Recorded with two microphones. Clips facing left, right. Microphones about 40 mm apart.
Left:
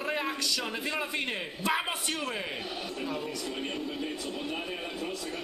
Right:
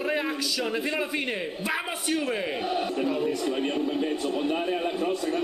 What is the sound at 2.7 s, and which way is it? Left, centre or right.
Speech, right.